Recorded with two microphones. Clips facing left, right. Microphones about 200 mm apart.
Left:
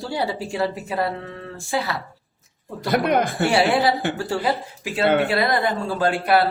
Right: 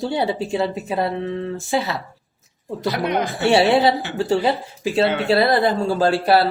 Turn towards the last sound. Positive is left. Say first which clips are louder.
# right 3 dB
turn(degrees=-30)  # may be behind; listen again after turning